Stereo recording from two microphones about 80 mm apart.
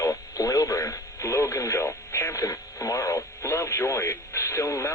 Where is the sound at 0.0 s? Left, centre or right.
Left.